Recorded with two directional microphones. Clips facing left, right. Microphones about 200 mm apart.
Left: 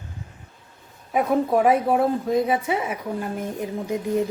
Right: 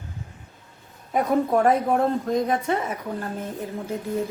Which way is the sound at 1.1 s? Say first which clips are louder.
Left 1 dB; 5° left (ahead or behind).